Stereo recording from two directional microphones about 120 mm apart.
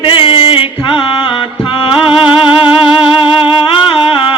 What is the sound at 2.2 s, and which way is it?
Music, 45° left (ahead or behind).